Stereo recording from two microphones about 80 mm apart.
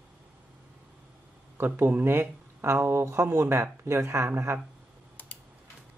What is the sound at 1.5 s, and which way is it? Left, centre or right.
Speech, right.